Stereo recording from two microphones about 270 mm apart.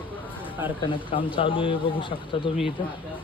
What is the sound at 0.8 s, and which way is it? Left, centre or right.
Speech, centre.